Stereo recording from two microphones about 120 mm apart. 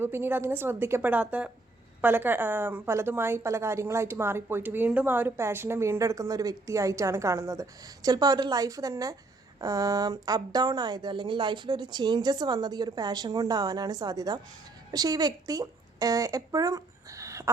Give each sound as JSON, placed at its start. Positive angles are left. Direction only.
{"t": 0.0, "sound": "a woman's voice", "side_deg": -20}